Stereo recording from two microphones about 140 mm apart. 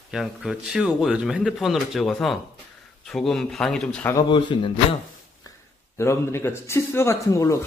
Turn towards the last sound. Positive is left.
turn(degrees=20)  # may be behind; listen again after turning